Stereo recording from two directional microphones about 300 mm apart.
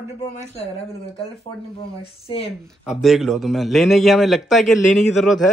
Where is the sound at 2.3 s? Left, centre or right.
Centre.